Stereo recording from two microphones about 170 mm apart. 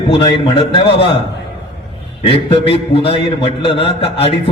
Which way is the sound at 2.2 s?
35° left (ahead or behind).